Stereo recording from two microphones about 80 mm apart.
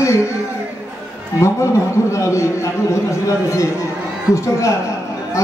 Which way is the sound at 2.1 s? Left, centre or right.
Left.